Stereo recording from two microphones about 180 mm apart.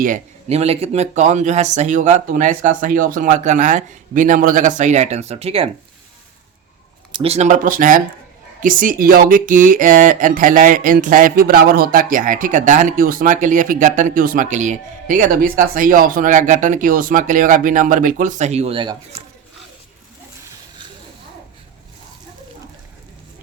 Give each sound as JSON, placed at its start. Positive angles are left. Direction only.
{"t": 0.0, "sound": "speech", "side_deg": -40}
{"t": 7.1, "sound": "speech", "side_deg": -35}